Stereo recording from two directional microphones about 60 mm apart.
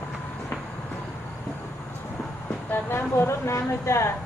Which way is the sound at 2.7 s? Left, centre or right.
Left.